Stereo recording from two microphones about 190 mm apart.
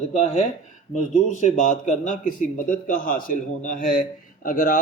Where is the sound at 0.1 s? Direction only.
35° left (ahead or behind).